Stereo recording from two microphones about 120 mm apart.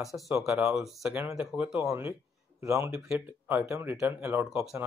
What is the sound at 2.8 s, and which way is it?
Speech, 5° right (ahead or behind).